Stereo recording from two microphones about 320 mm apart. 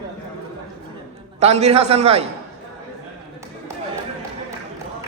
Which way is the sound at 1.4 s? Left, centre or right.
Centre.